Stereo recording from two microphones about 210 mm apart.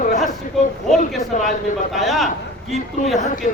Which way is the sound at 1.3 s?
35° left (ahead or behind).